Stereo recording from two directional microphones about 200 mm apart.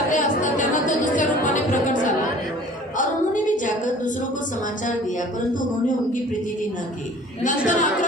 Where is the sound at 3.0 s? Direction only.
40° left (ahead or behind).